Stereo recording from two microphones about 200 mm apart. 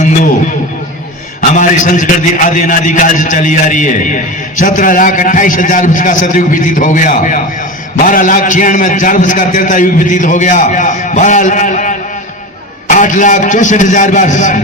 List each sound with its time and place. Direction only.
1.4 s a man's voice: 40° left (ahead or behind)